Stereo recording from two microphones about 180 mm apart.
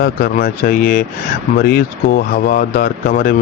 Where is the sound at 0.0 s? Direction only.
55° left (ahead or behind).